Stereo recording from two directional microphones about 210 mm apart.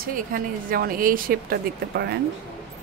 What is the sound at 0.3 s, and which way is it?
A woman's voice, 45° right (ahead or behind).